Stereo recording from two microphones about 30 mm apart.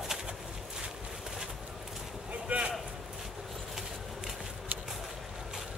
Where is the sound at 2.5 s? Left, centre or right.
Right.